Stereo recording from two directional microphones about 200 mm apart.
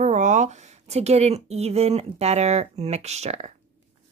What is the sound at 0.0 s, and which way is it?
A woman's voice, 40° right (ahead or behind).